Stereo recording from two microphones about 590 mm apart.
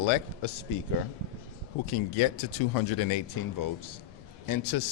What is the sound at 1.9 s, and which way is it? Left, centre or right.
A man's voice, left.